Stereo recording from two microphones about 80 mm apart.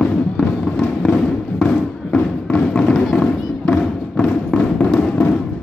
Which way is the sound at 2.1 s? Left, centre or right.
Centre.